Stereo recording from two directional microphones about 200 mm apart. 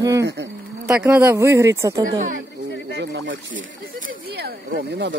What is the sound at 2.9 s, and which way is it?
Speech, 60° right (ahead or behind).